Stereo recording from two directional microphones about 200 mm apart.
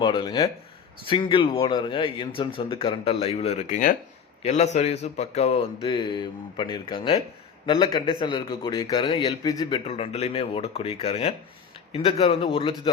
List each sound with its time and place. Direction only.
0.0 s a man's voice: 20° left (ahead or behind)